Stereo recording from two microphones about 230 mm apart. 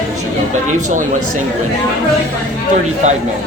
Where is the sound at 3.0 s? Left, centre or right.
Right.